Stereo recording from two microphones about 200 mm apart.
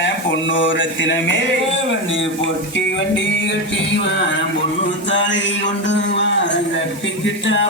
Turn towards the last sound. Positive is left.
turn(degrees=65)  # may be behind; listen again after turning